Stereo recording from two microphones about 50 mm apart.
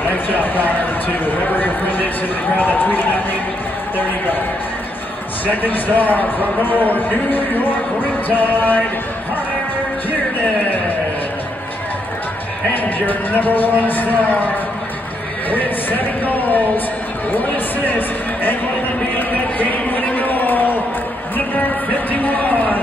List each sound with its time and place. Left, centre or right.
0.1 s a man's voice: left
5.5 s a man's voice: left
12.7 s a man's voice: left
15.5 s a man's voice: left
19.1 s a sound: left
22.2 s a man's voice: left